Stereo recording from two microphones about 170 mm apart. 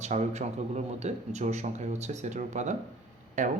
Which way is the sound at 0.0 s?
40° right (ahead or behind).